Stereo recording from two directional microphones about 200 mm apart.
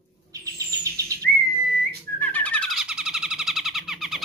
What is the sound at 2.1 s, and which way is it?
Music, 5° left (ahead or behind).